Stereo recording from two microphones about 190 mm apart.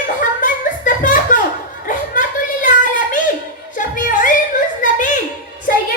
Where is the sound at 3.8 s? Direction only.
45° left (ahead or behind).